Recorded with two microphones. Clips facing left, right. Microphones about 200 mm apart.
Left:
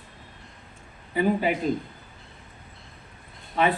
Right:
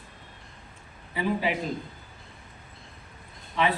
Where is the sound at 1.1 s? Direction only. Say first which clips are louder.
Left 4 dB; 45° left (ahead or behind).